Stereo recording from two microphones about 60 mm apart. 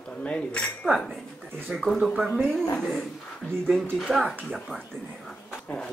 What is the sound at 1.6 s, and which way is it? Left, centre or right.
Speech, centre.